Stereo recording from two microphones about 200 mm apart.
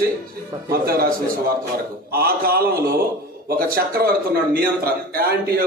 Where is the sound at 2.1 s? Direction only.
50° right (ahead or behind).